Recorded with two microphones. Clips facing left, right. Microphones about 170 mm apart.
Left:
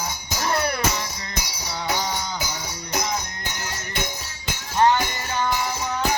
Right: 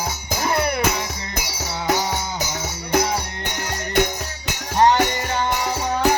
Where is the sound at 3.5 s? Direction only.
65° right (ahead or behind).